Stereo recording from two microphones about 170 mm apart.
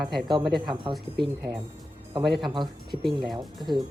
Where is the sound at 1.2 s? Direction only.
20° right (ahead or behind).